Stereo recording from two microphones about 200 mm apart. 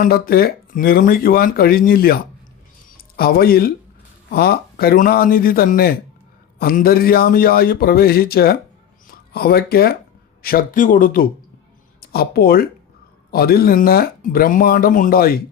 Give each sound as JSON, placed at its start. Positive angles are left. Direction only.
{"t": 0.0, "sound": "speech", "side_deg": 50}